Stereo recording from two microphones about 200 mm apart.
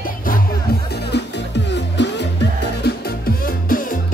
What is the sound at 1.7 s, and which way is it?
Music, 60° left (ahead or behind).